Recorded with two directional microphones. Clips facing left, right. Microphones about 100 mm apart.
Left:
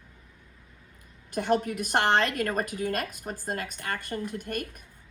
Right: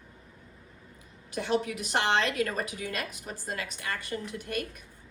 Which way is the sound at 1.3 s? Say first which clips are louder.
Left 3 dB; 50° left (ahead or behind).